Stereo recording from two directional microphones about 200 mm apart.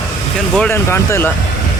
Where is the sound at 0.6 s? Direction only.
10° left (ahead or behind).